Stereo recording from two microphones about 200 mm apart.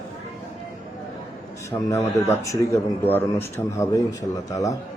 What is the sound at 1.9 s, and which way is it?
Speech, 15° left (ahead or behind).